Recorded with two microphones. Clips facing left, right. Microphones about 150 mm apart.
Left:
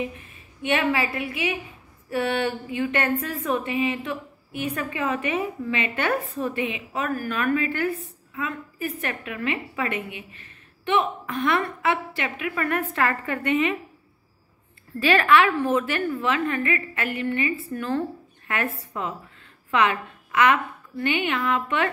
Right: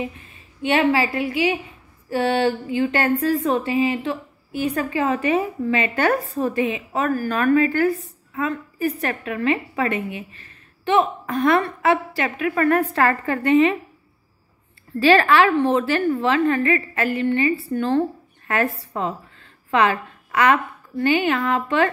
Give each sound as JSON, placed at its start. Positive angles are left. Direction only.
{"t": 0.6, "sound": "a woman's voice", "side_deg": -30}
{"t": 15.0, "sound": "a woman's voice", "side_deg": -35}
{"t": 18.9, "sound": "a sound", "side_deg": -35}
{"t": 21.0, "sound": "a woman's voice", "side_deg": -35}